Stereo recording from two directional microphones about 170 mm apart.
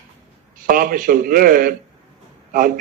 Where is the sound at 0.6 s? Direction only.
55° right (ahead or behind).